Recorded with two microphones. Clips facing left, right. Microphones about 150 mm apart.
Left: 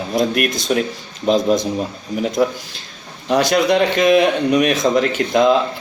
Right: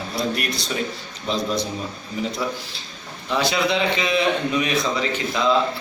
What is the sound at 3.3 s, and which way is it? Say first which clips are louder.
Speech: left 7 dB; 45° left (ahead or behind).